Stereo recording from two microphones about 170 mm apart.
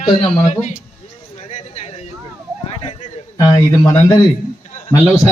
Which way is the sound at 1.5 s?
40° left (ahead or behind).